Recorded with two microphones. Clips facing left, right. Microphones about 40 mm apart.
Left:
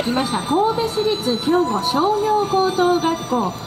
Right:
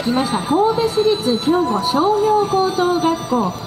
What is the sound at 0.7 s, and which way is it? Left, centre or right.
Speech, centre.